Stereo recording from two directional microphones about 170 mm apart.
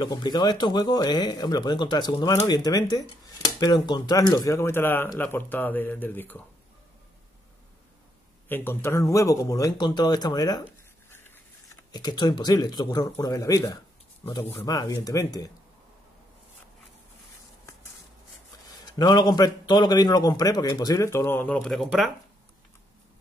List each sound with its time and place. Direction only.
0.0 s a man's voice: 25° left (ahead or behind)
8.5 s a man's voice: 10° left (ahead or behind)
11.1 s a sound: 15° left (ahead or behind)
11.9 s a man's voice: 25° left (ahead or behind)
14.2 s speech: 30° left (ahead or behind)
14.5 s a man's voice: 15° left (ahead or behind)
18.9 s a man's voice: 25° left (ahead or behind); by 22.1 s centre (ahead or behind)